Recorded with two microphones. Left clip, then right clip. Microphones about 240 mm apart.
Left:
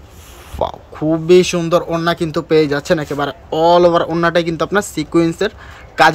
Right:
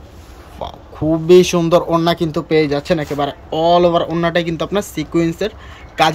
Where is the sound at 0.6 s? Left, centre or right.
Left.